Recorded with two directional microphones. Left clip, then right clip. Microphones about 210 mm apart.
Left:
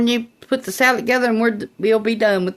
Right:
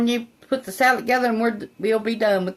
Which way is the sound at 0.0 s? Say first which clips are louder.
Left 4 dB; 50° left (ahead or behind).